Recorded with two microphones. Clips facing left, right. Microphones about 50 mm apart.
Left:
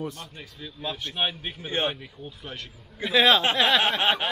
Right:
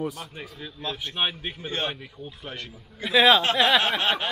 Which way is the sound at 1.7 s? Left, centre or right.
Centre.